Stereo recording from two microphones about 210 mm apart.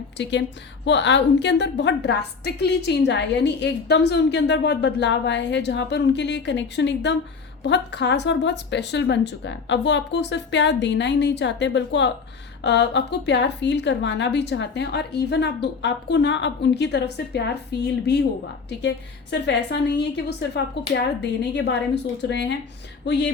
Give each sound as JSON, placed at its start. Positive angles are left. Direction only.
{"t": 0.2, "sound": "a woman's voice", "side_deg": 55}